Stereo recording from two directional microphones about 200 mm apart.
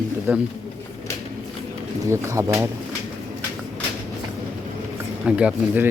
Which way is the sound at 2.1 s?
15° right (ahead or behind).